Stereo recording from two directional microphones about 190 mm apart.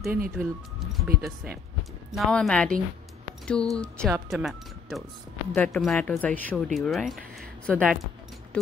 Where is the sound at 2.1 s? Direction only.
Centre (ahead or behind).